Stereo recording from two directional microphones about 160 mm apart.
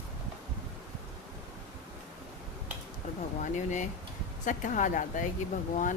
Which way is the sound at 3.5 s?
50° left (ahead or behind).